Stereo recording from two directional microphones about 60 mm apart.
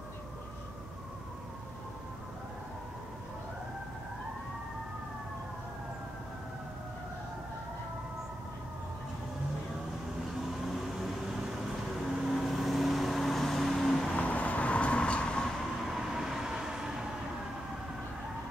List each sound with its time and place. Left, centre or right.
10.7 s vehicle: centre
14.1 s vehicle: left
15.8 s train: centre